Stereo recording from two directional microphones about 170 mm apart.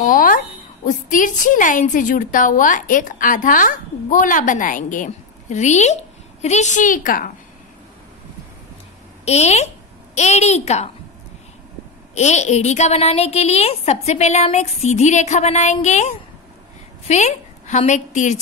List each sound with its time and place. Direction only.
0.0 s a woman's voice: 55° left (ahead or behind)
9.2 s a woman's voice: 40° left (ahead or behind)
12.2 s a woman's voice: 40° left (ahead or behind)